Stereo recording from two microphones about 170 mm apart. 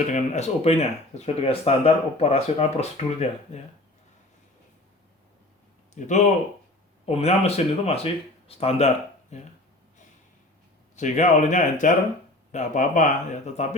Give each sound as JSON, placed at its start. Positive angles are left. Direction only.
{"t": 0.1, "sound": "speech", "side_deg": 40}
{"t": 5.9, "sound": "speech", "side_deg": 45}
{"t": 10.9, "sound": "speech", "side_deg": 45}